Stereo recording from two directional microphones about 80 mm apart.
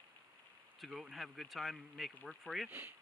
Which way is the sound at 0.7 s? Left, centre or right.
Centre.